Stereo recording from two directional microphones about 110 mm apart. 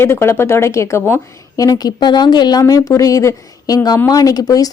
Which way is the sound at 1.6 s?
35° left (ahead or behind).